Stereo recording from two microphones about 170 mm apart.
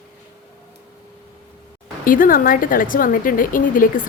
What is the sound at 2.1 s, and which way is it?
A woman's voice, 55° left (ahead or behind).